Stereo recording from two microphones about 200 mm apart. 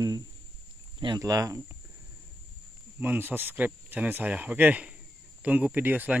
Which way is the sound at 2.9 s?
10° right (ahead or behind).